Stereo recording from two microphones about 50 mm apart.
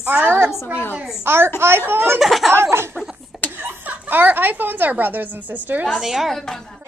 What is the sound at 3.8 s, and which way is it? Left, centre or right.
A woman's voice, right.